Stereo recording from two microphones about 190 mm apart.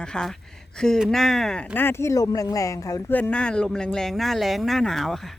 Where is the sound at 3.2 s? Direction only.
5° left (ahead or behind).